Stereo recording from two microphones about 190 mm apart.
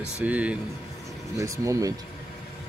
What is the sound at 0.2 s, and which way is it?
Speech, 5° right (ahead or behind).